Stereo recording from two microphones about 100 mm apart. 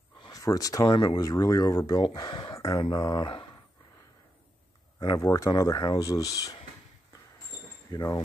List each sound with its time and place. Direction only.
0.3 s speech: 35° left (ahead or behind)
2.1 s speech: 50° left (ahead or behind)
2.8 s speech: 40° left (ahead or behind)
5.0 s speech: 30° left (ahead or behind)